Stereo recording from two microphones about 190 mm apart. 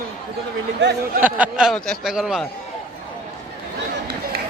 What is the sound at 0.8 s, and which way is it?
Speech, 60° right (ahead or behind).